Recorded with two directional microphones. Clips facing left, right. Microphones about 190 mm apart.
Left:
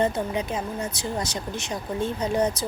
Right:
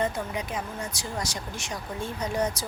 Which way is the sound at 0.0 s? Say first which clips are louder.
Left 5 dB; 25° left (ahead or behind).